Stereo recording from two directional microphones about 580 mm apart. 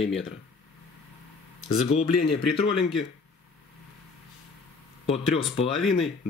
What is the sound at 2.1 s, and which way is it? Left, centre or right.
Speech, left.